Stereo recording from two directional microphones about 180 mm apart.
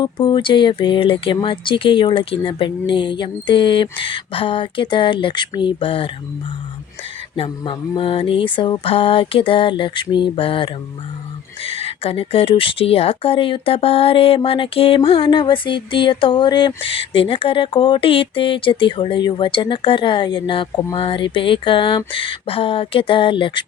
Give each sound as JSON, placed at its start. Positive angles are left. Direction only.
{"t": 0.0, "sound": "speech", "side_deg": 25}
{"t": 7.3, "sound": "speech", "side_deg": 30}